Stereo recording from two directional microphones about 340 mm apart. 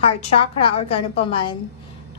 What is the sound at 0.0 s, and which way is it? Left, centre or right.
A woman's voice, centre.